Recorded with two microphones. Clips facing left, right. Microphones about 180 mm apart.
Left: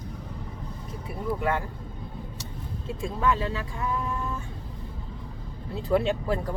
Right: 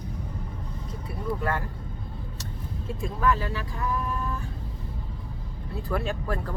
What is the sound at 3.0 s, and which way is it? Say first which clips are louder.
Speech: even; 25° left (ahead or behind).